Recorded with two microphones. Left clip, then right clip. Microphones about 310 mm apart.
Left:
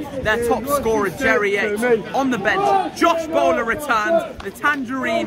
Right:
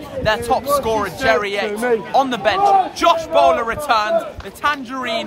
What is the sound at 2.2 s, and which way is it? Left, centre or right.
A man's voice, centre.